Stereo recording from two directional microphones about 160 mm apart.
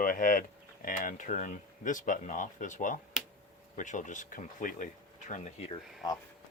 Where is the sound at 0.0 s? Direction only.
60° left (ahead or behind).